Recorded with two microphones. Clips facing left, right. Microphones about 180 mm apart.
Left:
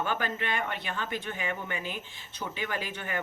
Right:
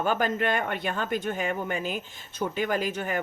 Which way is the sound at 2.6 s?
45° right (ahead or behind).